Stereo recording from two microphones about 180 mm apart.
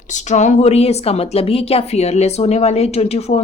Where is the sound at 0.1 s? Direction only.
40° left (ahead or behind).